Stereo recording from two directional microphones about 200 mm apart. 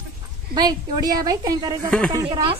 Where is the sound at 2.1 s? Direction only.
25° right (ahead or behind).